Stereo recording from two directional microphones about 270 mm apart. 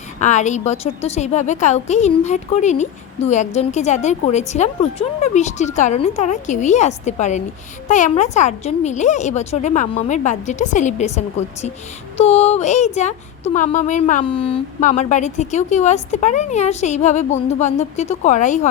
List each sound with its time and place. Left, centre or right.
0.2 s a woman's voice: left